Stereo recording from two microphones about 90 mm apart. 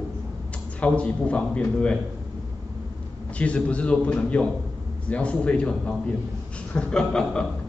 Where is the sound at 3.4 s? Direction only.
15° left (ahead or behind).